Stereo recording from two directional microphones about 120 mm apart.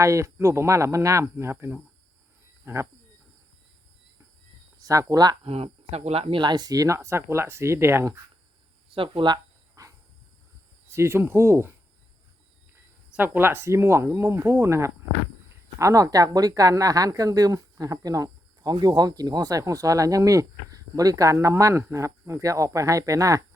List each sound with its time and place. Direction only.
0.0 s speech: 25° right (ahead or behind)
4.8 s speech: 30° right (ahead or behind)
5.4 s speech: 55° right (ahead or behind)
6.4 s speech: 35° right (ahead or behind)
8.9 s a sound: 45° right (ahead or behind)
10.8 s speech: 20° right (ahead or behind)
13.1 s speech: 15° right (ahead or behind)